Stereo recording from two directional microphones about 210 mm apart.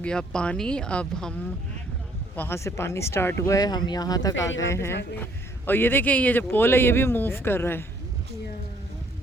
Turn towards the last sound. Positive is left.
turn(degrees=10)  # may be behind; listen again after turning